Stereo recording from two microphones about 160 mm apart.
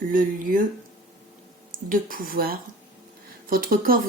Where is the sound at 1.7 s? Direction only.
60° right (ahead or behind).